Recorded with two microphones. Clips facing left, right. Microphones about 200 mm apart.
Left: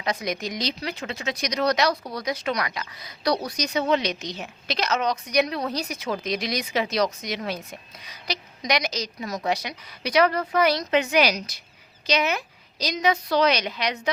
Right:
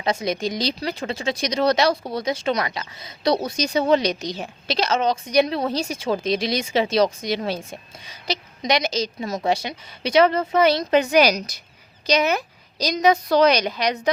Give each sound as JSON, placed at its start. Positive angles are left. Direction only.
{"t": 0.0, "sound": "speech", "side_deg": -30}
{"t": 10.9, "sound": "a woman's voice", "side_deg": -40}